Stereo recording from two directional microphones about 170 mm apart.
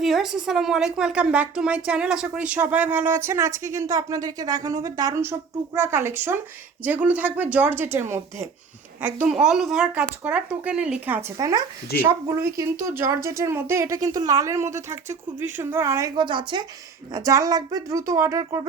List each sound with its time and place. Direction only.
0.0 s a woman's voice: centre (ahead or behind)
9.2 s a woman's voice: 5° right (ahead or behind)